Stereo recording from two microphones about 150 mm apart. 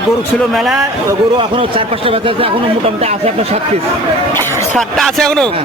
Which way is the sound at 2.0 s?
40° right (ahead or behind).